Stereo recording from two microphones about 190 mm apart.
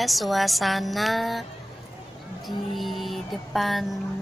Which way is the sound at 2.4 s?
Centre (ahead or behind).